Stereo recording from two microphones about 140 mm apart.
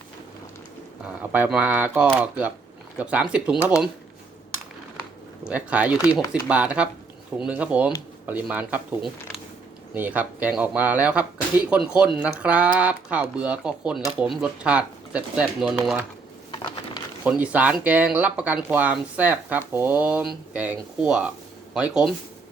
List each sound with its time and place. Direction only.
1.0 s speech: 10° right (ahead or behind)
5.5 s speech: 10° right (ahead or behind)
9.9 s speech: 10° right (ahead or behind)
16.5 s a sound: 35° left (ahead or behind)
17.2 s speech: 10° right (ahead or behind)